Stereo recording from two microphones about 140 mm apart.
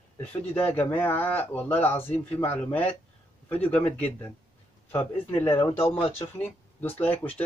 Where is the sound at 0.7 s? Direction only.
10° left (ahead or behind).